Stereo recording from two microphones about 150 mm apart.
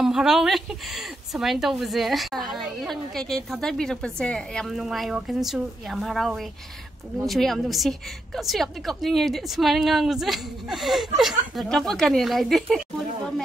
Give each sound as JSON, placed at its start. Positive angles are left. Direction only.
{"t": 0.0, "sound": "speech", "side_deg": -5}